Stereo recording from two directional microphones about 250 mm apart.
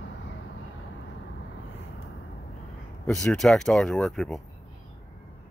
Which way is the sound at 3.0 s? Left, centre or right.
Centre.